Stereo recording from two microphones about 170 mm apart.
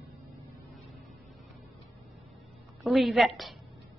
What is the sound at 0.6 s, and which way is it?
Vehicle, centre (ahead or behind).